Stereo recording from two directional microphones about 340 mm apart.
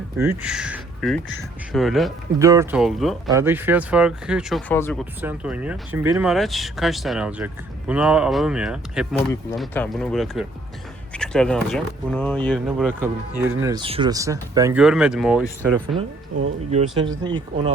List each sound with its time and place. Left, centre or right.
0.2 s speech: centre
16.3 s speech: right
17.2 s speech: centre